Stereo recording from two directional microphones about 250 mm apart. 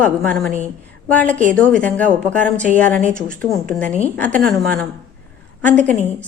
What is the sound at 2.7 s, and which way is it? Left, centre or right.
Speech, right.